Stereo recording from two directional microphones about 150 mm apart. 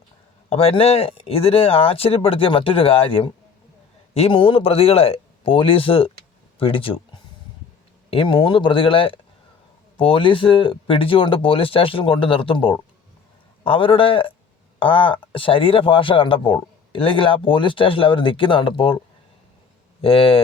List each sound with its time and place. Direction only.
0.5 s a man's voice: 40° left (ahead or behind)
8.1 s a man's voice: 35° left (ahead or behind)
20.0 s a man's voice: 40° left (ahead or behind)